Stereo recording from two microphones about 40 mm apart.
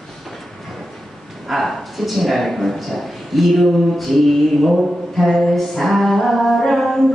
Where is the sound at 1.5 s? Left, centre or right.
Centre.